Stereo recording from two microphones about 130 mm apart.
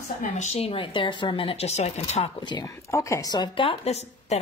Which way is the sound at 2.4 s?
35° left (ahead or behind).